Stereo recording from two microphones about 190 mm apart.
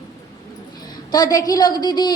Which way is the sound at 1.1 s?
20° left (ahead or behind).